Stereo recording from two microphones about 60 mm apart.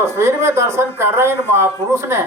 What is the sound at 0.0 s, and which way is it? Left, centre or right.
A man's voice, right.